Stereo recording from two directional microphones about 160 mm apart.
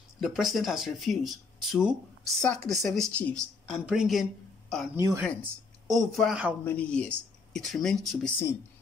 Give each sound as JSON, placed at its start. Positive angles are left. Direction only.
{"t": 0.2, "sound": "speech", "side_deg": 0}
{"t": 4.9, "sound": "speech", "side_deg": -15}
{"t": 5.9, "sound": "speech", "side_deg": 0}